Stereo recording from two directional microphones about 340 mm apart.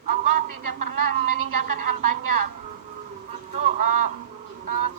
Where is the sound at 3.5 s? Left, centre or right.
Right.